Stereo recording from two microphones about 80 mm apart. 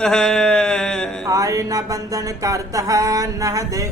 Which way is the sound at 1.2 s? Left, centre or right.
Right.